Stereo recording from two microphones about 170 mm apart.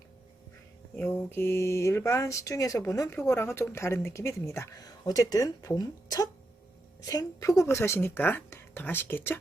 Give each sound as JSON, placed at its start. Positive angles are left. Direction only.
{"t": 0.9, "sound": "speech", "side_deg": 10}